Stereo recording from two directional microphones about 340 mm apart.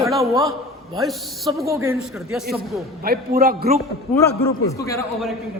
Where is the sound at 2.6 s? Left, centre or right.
Right.